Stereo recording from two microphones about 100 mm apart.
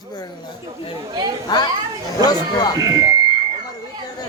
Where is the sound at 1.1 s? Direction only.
45° right (ahead or behind).